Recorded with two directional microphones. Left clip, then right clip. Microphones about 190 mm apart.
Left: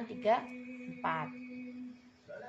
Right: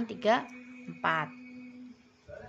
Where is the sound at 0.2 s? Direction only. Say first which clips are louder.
Right 3 dB; 45° right (ahead or behind).